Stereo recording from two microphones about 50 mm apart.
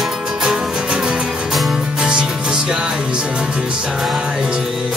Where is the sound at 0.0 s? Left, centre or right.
Centre.